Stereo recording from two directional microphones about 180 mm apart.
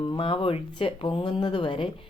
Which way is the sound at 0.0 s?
25° left (ahead or behind).